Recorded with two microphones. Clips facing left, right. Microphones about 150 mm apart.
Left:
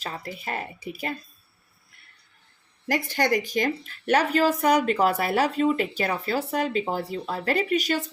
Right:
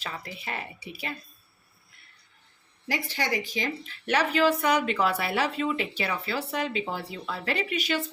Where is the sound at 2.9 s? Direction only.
50° left (ahead or behind).